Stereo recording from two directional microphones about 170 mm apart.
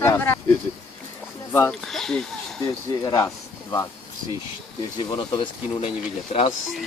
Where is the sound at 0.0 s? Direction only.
15° left (ahead or behind).